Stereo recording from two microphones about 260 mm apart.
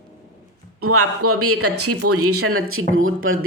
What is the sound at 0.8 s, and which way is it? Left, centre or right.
Speech, right.